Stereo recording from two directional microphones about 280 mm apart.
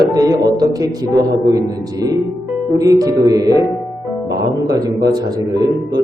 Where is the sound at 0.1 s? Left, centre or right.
Centre.